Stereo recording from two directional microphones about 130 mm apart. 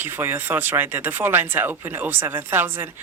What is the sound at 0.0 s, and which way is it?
Speech, 15° right (ahead or behind).